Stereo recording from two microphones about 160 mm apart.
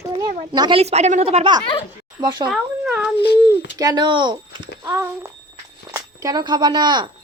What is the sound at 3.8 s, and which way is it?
Speech, 25° right (ahead or behind).